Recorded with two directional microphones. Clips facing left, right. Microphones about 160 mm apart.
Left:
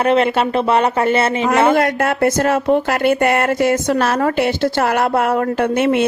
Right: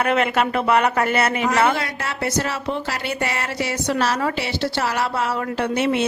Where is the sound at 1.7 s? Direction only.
50° left (ahead or behind).